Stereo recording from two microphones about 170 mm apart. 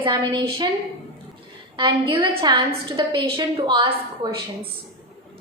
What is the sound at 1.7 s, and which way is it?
A woman's voice, 30° right (ahead or behind).